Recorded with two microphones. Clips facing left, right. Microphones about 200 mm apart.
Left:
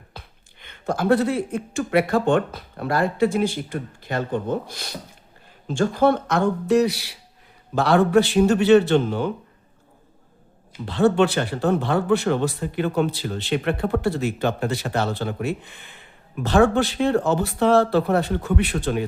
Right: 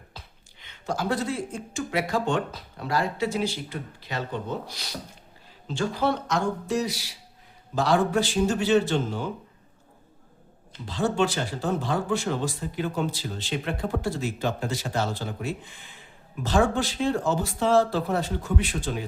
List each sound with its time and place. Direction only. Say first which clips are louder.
0.1 s speech: left 4 dB; 55° left (ahead or behind)
10.8 s speech: left 7 dB; 60° left (ahead or behind)